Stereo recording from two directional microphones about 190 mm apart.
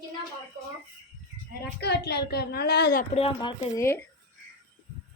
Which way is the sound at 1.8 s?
60° left (ahead or behind).